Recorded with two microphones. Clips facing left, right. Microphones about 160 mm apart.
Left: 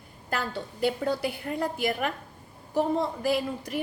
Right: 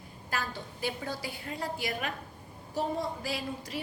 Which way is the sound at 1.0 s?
60° left (ahead or behind).